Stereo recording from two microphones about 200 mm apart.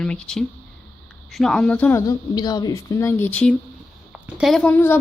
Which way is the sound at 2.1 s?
20° left (ahead or behind).